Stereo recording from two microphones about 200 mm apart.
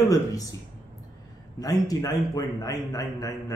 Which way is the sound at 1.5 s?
20° left (ahead or behind).